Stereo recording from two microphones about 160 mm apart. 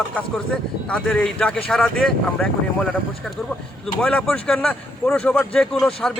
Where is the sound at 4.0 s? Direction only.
5° left (ahead or behind).